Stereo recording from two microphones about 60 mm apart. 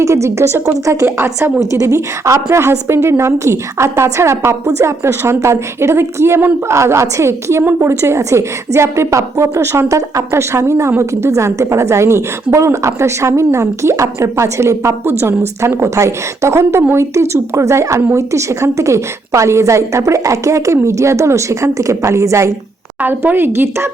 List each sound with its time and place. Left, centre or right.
0.0 s a woman's voice: right
1.0 s a woman's voice: right
1.7 s a woman's voice: right
23.0 s a woman's voice: right